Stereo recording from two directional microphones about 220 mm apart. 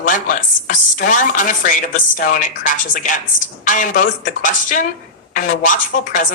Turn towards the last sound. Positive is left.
turn(degrees=35)  # may be behind; listen again after turning